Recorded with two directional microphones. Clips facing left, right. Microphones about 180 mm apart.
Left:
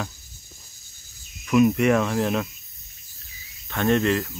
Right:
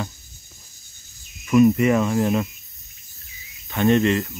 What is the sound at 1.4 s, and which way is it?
Speech, centre (ahead or behind).